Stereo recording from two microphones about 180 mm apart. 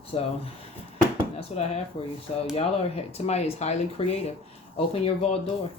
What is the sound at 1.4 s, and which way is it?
Speech, 35° left (ahead or behind).